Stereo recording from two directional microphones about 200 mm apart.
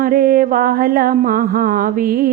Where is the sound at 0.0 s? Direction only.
45° right (ahead or behind).